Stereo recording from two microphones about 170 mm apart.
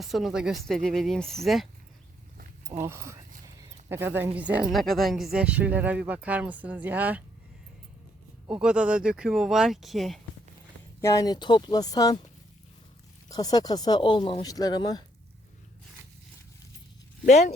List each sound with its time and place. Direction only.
0.0 s speech: centre (ahead or behind)
2.8 s speech: 15° right (ahead or behind)
8.4 s speech: 5° right (ahead or behind)
11.0 s speech: 20° left (ahead or behind)
13.2 s speech: 20° left (ahead or behind)
17.2 s speech: 45° left (ahead or behind)